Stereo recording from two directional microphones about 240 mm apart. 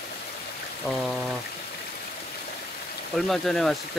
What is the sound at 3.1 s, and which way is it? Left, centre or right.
Speech, centre.